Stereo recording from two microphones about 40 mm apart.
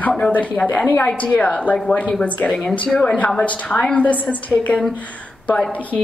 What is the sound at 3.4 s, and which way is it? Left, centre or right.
A woman's voice, left.